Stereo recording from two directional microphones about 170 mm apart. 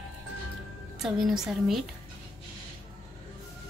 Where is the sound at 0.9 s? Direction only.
Centre (ahead or behind).